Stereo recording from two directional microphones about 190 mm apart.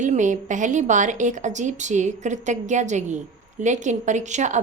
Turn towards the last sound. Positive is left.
turn(degrees=-40)  # may be behind; listen again after turning